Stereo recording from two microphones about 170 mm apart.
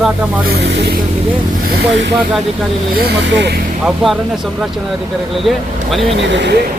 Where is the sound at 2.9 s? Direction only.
80° right.